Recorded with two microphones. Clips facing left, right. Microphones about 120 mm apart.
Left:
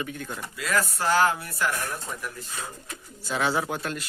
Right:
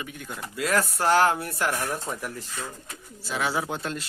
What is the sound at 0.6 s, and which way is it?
Speech, 55° right (ahead or behind).